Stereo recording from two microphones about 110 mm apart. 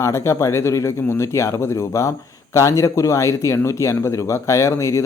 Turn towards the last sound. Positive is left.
turn(degrees=25)  # may be behind; listen again after turning